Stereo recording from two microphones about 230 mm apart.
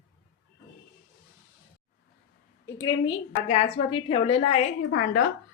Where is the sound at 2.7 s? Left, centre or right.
Centre.